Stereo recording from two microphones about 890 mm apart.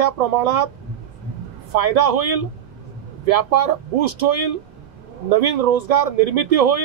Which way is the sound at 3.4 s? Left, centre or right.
Right.